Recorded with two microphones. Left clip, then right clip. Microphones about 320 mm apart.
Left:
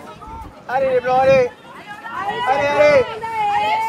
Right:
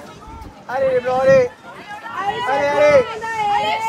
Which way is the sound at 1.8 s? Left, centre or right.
Centre.